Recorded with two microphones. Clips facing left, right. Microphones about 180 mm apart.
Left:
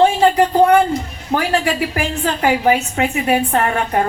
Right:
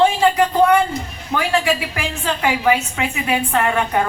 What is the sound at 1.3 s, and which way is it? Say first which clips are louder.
A woman's voice: left 1 dB; 40° left (ahead or behind).